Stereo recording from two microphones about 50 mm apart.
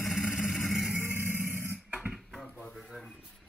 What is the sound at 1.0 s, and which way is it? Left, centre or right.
Music, right.